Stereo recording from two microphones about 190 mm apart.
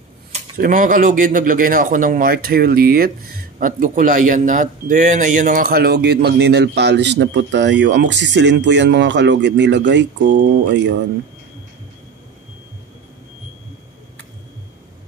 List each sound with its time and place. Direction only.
0.6 s speech: 45° right (ahead or behind); by 10.3 s 70° right (ahead or behind)